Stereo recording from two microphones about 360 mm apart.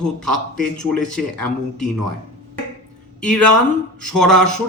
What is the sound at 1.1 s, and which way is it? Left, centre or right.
Speech, centre.